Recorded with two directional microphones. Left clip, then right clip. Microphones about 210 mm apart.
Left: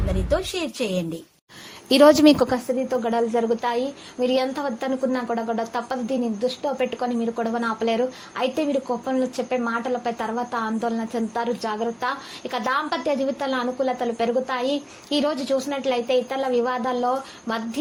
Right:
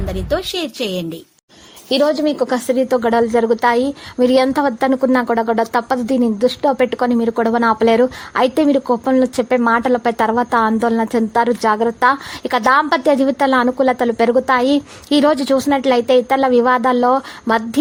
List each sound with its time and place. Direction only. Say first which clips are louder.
0.3 s a woman's voice: right 5 dB; 25° right (ahead or behind)
1.9 s a woman's voice: left 1 dB; 15° left (ahead or behind)
2.6 s a woman's voice: right 8 dB; 35° right (ahead or behind)